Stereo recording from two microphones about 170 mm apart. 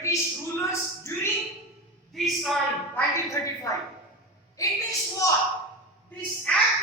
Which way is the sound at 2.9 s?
20° left (ahead or behind).